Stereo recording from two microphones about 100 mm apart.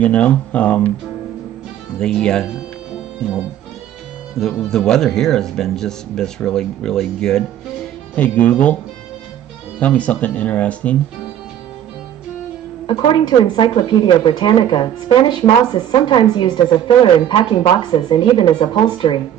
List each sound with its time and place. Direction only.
0.0 s speech: 15° left (ahead or behind)
2.0 s speech: 5° left (ahead or behind)
4.4 s speech: centre (ahead or behind)
9.8 s speech: 15° left (ahead or behind)
12.8 s speech: 55° left (ahead or behind)
16.2 s speech: 50° left (ahead or behind)